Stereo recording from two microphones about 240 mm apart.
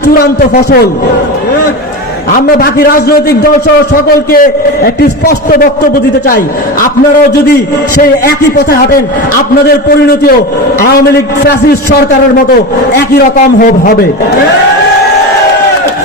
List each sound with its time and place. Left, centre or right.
0.1 s a man's voice: left
2.3 s a man's voice: left
8.0 s a man's voice: left
13.3 s a man's voice: left